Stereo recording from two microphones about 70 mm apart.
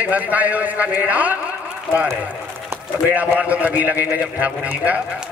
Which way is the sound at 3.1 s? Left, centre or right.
Right.